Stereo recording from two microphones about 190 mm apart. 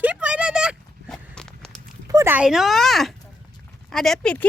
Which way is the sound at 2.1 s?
20° right (ahead or behind).